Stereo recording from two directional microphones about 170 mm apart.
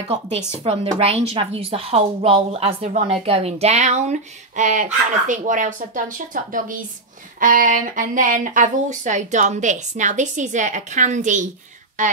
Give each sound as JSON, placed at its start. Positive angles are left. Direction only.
{"t": 0.7, "sound": "a woman's voice", "side_deg": -35}